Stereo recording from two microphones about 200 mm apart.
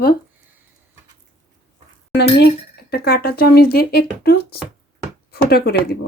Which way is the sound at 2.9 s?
50° left (ahead or behind).